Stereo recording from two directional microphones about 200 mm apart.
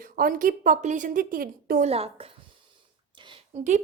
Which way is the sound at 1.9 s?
30° right (ahead or behind).